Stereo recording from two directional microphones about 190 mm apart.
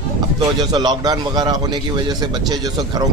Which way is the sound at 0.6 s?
20° right (ahead or behind).